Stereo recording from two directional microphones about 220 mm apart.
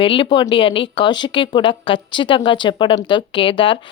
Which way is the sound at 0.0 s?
25° left (ahead or behind).